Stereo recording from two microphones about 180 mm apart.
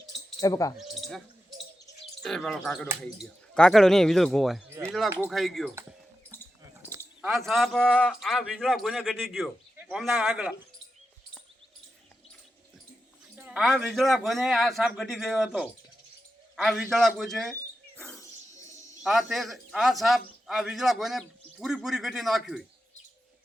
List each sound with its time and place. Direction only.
0.3 s speech: 20° left (ahead or behind)
2.2 s a man's voice: 5° left (ahead or behind)
7.2 s a man's voice: centre (ahead or behind)
13.3 s a man's voice: 5° right (ahead or behind)